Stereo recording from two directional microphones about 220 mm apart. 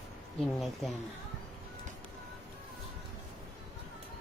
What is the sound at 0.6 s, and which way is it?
Speech, centre (ahead or behind).